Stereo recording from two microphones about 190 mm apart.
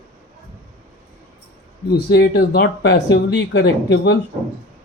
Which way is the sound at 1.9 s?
55° left (ahead or behind).